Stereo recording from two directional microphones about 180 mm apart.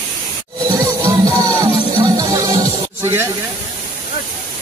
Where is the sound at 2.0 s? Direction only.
20° right (ahead or behind).